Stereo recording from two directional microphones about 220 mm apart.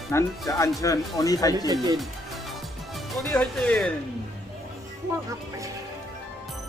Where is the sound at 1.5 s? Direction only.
15° right (ahead or behind).